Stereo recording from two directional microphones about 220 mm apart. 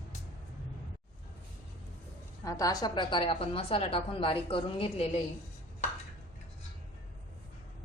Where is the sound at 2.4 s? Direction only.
15° left (ahead or behind).